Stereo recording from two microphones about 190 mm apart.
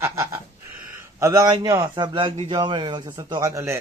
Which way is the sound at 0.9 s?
15° right (ahead or behind).